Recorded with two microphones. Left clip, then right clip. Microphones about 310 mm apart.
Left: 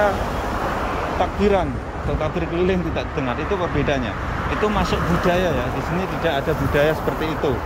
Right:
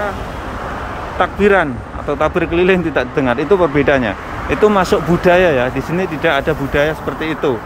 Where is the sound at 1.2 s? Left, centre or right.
Centre.